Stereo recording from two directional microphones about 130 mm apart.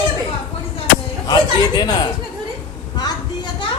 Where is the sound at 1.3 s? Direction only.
30° left (ahead or behind).